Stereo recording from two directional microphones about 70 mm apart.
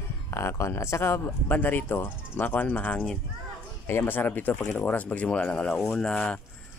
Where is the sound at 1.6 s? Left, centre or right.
Left.